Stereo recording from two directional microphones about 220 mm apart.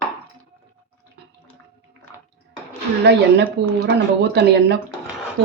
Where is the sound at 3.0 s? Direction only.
50° right (ahead or behind).